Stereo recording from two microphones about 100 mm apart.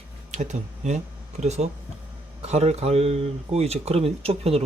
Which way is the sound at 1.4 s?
90° right.